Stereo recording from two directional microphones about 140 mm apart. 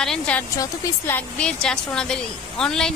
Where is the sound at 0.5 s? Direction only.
25° left (ahead or behind).